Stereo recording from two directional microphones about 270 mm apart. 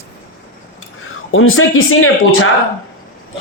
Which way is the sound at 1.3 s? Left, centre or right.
Left.